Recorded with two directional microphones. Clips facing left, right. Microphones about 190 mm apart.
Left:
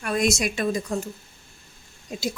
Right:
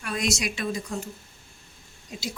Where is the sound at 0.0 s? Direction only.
50° left (ahead or behind).